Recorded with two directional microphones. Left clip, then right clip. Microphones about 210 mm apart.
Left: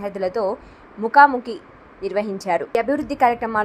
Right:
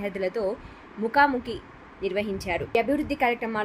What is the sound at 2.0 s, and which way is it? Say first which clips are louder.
Speech: left 5 dB; 35° left (ahead or behind).